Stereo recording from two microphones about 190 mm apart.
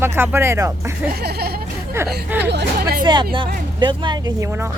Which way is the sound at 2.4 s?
60° right (ahead or behind).